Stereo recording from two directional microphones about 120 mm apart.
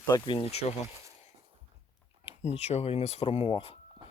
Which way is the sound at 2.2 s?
60° left (ahead or behind).